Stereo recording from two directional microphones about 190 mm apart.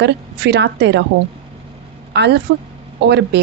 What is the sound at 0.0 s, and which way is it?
A woman's voice, 65° right (ahead or behind).